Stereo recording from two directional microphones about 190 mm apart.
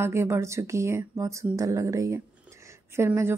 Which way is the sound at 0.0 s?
15° right (ahead or behind).